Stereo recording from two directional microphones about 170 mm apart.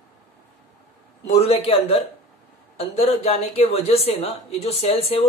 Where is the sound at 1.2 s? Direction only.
35° left (ahead or behind).